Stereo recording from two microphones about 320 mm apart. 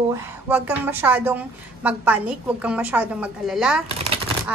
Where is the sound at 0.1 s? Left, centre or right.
Centre.